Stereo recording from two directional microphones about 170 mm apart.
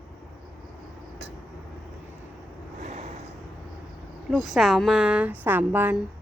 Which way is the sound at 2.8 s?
45° right (ahead or behind).